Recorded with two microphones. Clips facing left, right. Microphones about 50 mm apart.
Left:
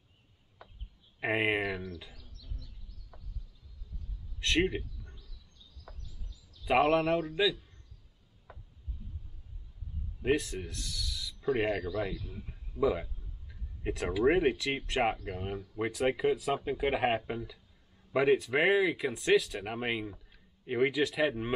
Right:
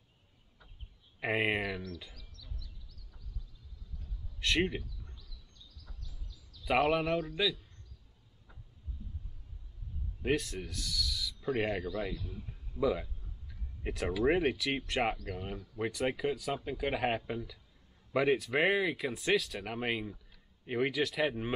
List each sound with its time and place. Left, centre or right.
1.2 s speech: centre
4.4 s a sound: centre
5.9 s bird: left
6.6 s speech: centre
10.2 s speech: centre
12.7 s speech: centre
15.8 s speech: centre